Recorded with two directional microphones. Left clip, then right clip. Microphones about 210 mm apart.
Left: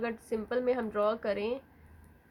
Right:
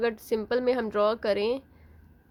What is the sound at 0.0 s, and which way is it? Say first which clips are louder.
A woman's voice: right 7 dB; 50° right (ahead or behind).